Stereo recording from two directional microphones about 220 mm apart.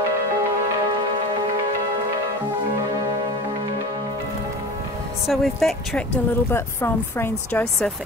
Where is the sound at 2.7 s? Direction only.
15° right (ahead or behind).